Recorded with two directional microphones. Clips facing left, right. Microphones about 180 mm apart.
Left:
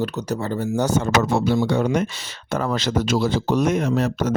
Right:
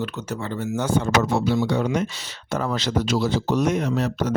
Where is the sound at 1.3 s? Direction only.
50° left (ahead or behind).